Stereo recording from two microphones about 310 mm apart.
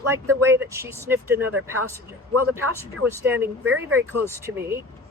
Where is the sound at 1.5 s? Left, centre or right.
Right.